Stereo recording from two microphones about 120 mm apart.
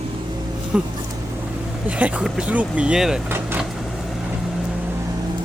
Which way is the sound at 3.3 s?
15° right (ahead or behind).